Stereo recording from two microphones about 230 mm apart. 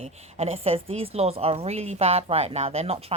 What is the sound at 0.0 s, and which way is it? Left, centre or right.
A woman's voice, right.